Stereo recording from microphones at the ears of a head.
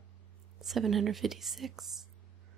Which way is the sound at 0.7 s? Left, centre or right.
Right.